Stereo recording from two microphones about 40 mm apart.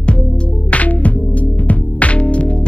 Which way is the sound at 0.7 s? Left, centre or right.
Left.